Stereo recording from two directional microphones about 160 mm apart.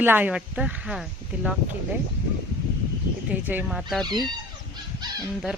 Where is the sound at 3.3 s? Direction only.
10° right (ahead or behind).